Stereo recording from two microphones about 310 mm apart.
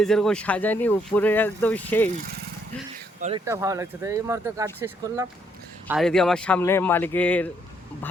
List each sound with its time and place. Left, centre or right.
0.0 s speech: centre
3.2 s speech: right
3.4 s speech: centre
5.9 s speech: centre